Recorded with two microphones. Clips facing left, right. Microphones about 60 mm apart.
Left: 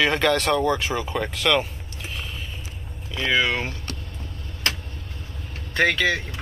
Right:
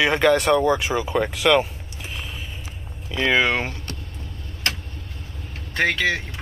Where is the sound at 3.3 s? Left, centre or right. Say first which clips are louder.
Right 1 dB; right.